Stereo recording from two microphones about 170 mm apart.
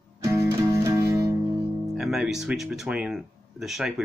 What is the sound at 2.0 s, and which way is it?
Speech, 5° right (ahead or behind).